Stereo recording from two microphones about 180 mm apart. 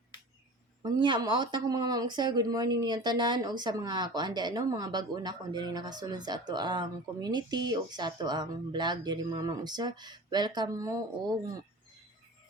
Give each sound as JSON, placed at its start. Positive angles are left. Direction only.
{"t": 0.8, "sound": "speech", "side_deg": -25}